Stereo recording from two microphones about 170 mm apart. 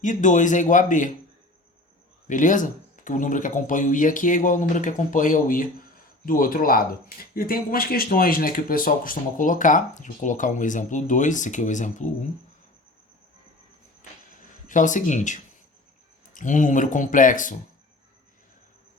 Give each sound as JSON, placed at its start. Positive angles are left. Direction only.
{"t": 0.0, "sound": "speech", "side_deg": 50}
{"t": 2.2, "sound": "speech", "side_deg": 50}
{"t": 14.7, "sound": "speech", "side_deg": 50}